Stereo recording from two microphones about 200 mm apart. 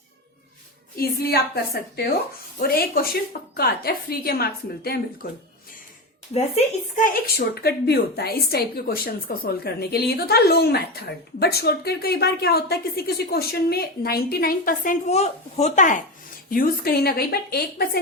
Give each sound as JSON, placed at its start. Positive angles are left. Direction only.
{"t": 0.9, "sound": "speech", "side_deg": 50}
{"t": 6.3, "sound": "speech", "side_deg": 35}